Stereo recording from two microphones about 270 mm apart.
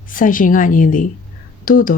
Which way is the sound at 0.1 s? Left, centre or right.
Left.